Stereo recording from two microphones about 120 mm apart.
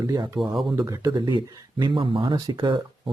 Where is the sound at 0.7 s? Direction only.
25° right (ahead or behind).